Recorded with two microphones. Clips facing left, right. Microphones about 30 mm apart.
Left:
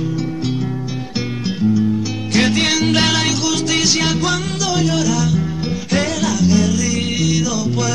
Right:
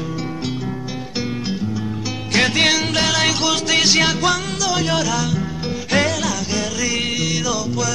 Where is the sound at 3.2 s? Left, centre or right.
Centre.